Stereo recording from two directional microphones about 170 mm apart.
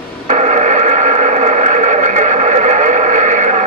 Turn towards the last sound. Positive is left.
turn(degrees=-45)  # may be behind; listen again after turning